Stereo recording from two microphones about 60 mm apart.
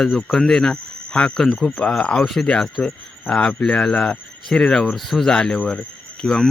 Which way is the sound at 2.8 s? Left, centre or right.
Left.